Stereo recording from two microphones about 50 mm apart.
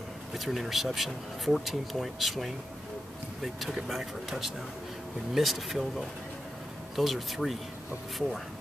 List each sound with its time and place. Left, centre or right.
0.3 s speech: centre